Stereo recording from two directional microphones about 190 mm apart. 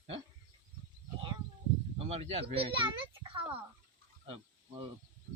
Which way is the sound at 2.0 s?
35° right (ahead or behind).